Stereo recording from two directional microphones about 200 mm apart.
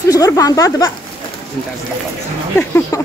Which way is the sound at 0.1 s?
15° left (ahead or behind).